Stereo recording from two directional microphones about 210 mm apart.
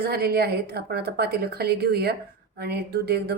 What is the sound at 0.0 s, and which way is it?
Speech, 50° right (ahead or behind).